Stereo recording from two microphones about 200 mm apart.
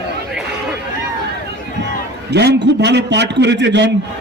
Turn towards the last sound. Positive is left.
turn(degrees=-60)  # may be behind; listen again after turning